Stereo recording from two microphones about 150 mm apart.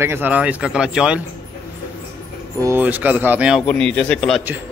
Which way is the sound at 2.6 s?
15° right (ahead or behind).